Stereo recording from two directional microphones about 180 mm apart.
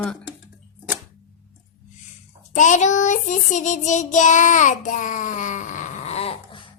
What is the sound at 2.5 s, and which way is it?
Child singing, 45° left (ahead or behind).